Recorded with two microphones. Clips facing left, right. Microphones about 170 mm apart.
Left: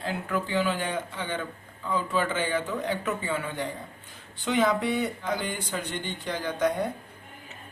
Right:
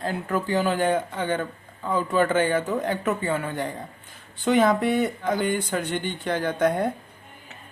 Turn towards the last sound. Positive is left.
turn(degrees=-55)  # may be behind; listen again after turning